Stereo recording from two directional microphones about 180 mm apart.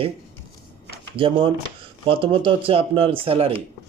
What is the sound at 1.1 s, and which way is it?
Speech, 30° right (ahead or behind).